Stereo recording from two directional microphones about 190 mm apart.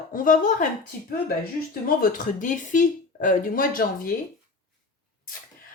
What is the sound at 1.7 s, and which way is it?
Speech, 45° left (ahead or behind).